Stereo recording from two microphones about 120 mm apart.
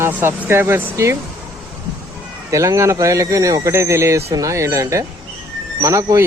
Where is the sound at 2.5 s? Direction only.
25° right (ahead or behind).